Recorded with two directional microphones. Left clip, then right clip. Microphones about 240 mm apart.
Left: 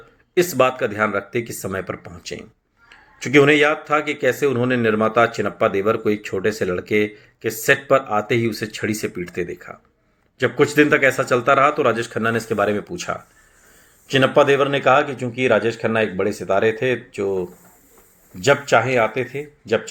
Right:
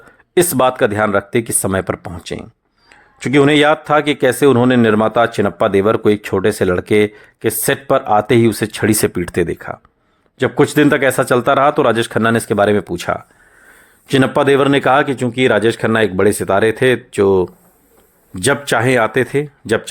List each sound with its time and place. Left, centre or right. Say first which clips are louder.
0.3 s a man's voice: right 4 dB; right